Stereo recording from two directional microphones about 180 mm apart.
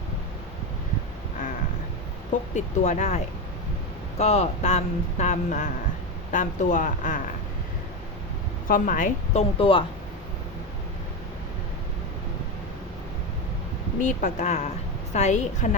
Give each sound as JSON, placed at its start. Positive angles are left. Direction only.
{"t": 2.3, "sound": "speech", "side_deg": 45}
{"t": 4.2, "sound": "speech", "side_deg": 35}
{"t": 8.6, "sound": "speech", "side_deg": 50}
{"t": 14.0, "sound": "speech", "side_deg": 45}